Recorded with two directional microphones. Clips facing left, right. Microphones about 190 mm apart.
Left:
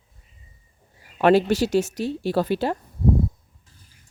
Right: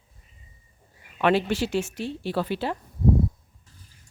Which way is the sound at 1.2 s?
40° left (ahead or behind).